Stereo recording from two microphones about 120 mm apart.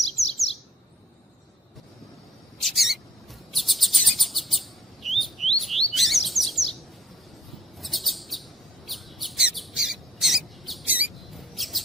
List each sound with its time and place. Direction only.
0.2 s chirp: centre (ahead or behind)
2.6 s mouse: centre (ahead or behind)
3.5 s chirp: centre (ahead or behind)
7.8 s chirp: centre (ahead or behind)
8.9 s a sound: centre (ahead or behind)
10.8 s squawk: 10° right (ahead or behind)
11.3 s mouse: centre (ahead or behind)